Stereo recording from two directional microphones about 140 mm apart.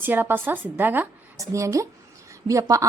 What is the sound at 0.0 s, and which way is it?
A woman's voice, 15° right (ahead or behind).